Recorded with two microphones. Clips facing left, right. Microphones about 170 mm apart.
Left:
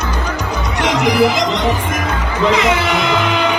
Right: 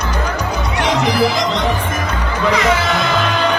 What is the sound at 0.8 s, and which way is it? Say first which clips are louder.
Music: left 2 dB; 15° left (ahead or behind).